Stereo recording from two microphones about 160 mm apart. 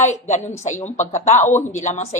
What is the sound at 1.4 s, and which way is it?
Speech, 10° left (ahead or behind).